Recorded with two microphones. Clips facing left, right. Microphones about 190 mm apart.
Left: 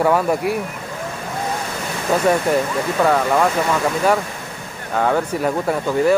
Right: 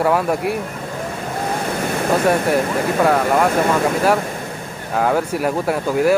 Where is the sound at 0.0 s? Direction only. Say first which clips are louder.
Left 1 dB; centre (ahead or behind).